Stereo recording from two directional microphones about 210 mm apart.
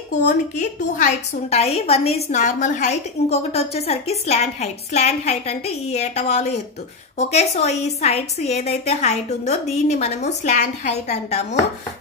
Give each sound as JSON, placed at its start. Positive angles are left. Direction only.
{"t": 0.2, "sound": "a woman's voice", "side_deg": 35}